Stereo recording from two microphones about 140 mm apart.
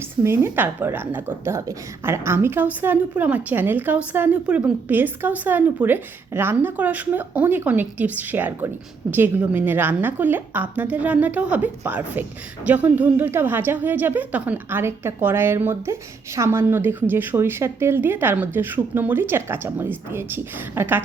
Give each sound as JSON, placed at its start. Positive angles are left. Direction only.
{"t": 0.2, "sound": "a woman's voice", "side_deg": -20}